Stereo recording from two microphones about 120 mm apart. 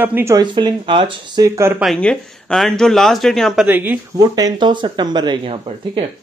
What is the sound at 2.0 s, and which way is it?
Speech, 10° left (ahead or behind).